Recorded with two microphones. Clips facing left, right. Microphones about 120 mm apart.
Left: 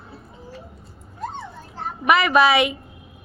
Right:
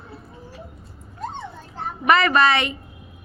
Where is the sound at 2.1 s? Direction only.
5° left (ahead or behind).